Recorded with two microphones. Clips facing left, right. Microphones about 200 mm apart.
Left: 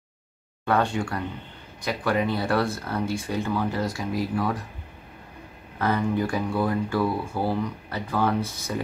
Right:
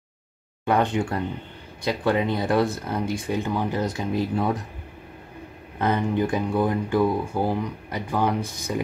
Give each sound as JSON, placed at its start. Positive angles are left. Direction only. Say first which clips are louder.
{"t": 0.7, "sound": "speech", "louder": "right 2 dB", "side_deg": -20}
{"t": 5.8, "sound": "speech", "louder": "right 1 dB", "side_deg": -20}